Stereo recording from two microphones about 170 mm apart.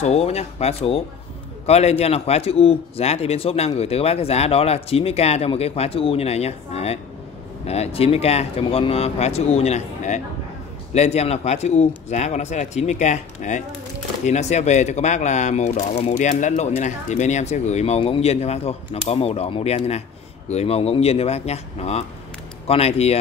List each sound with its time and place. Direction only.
0.0 s a man's voice: 40° left (ahead or behind)